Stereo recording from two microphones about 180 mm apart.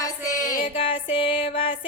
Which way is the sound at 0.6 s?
30° left (ahead or behind).